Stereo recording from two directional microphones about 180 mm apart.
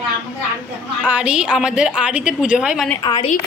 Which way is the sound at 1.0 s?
5° right (ahead or behind).